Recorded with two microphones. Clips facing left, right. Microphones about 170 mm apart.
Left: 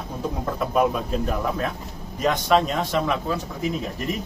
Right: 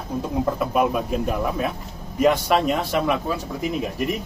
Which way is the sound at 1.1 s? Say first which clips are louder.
Right 1 dB; 10° right (ahead or behind).